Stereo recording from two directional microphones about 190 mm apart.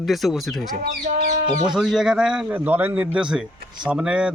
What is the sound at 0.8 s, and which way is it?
Speech, 50° right (ahead or behind).